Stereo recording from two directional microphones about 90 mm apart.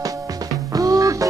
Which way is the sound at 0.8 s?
40° right (ahead or behind).